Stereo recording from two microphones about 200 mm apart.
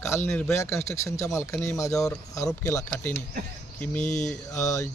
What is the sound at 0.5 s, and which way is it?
Speech, 15° left (ahead or behind).